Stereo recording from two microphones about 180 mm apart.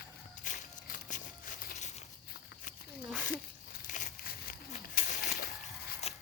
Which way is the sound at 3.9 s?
50° left (ahead or behind).